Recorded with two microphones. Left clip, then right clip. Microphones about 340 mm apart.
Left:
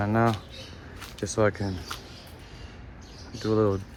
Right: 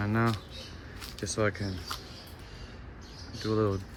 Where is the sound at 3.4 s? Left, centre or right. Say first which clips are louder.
Left 5 dB; left.